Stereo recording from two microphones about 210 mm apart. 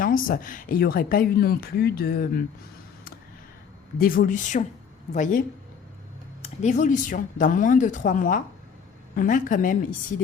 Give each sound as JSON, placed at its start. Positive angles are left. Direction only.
{"t": 0.0, "sound": "speech", "side_deg": 40}
{"t": 3.9, "sound": "speech", "side_deg": 45}
{"t": 6.4, "sound": "speech", "side_deg": 35}